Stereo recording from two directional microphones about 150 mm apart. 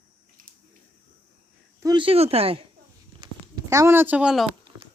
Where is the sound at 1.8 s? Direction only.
35° right (ahead or behind).